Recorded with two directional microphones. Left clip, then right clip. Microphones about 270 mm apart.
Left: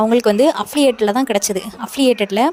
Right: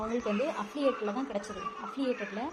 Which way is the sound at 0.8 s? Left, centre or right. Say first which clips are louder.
Left 14 dB; left.